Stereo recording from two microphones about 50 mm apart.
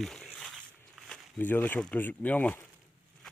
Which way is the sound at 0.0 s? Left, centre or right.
Centre.